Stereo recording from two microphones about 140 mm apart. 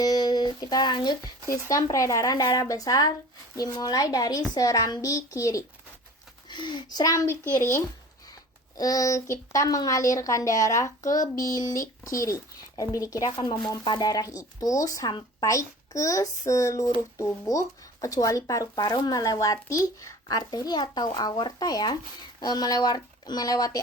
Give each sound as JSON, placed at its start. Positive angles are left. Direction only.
{"t": 0.0, "sound": "speech", "side_deg": 30}